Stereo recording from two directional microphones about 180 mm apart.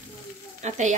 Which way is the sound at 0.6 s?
40° right (ahead or behind).